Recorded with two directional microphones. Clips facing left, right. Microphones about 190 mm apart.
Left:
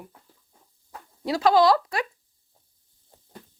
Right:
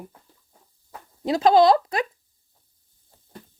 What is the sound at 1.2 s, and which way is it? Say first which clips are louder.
Speech: right 3 dB; 20° right (ahead or behind).